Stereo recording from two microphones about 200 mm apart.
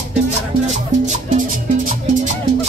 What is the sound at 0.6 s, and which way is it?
Music, 35° right (ahead or behind).